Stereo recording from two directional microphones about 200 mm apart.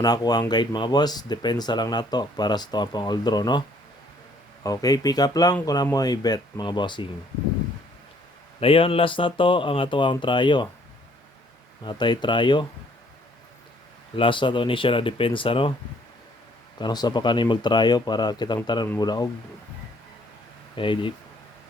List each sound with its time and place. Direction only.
0.0 s speech: 20° left (ahead or behind)
4.6 s speech: 20° left (ahead or behind)
8.6 s speech: 25° left (ahead or behind)
11.8 s speech: 20° left (ahead or behind)
14.2 s speech: 25° left (ahead or behind)
16.7 s speech: 20° left (ahead or behind)
20.7 s speech: 25° left (ahead or behind)